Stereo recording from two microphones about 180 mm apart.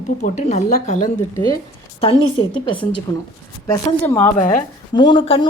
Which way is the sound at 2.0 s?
30° left (ahead or behind).